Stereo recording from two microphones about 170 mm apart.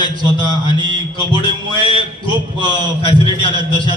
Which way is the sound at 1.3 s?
30° left (ahead or behind).